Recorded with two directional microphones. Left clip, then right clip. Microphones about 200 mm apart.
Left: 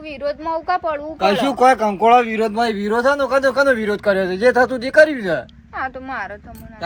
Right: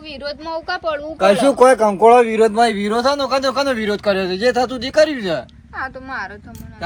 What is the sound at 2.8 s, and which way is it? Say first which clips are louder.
Speech: left 1 dB; 35° left (ahead or behind).